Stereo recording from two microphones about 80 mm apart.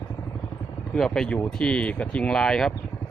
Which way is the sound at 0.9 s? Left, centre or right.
Centre.